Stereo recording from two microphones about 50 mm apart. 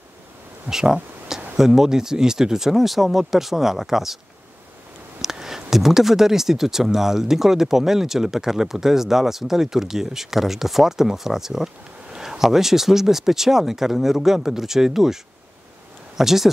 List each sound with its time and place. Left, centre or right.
0.7 s speech: centre
5.2 s speech: centre
16.2 s speech: centre